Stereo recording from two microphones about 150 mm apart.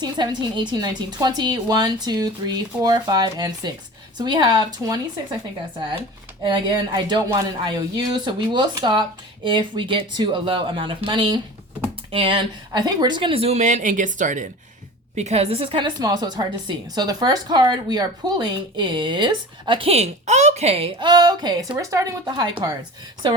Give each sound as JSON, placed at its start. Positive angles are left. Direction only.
{"t": 0.0, "sound": "a woman's voice", "side_deg": -30}
{"t": 6.5, "sound": "a woman's voice", "side_deg": -30}
{"t": 15.1, "sound": "a woman's voice", "side_deg": -45}